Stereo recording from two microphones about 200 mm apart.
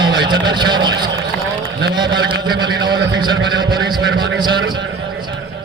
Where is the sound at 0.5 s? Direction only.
20° right (ahead or behind).